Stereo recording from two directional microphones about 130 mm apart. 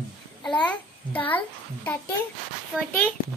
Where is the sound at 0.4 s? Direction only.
10° left (ahead or behind).